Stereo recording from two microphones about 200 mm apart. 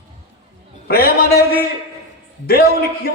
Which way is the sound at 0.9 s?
50° left (ahead or behind).